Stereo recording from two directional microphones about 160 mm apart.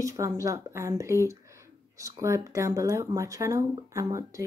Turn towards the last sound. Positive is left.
turn(degrees=-20)  # may be behind; listen again after turning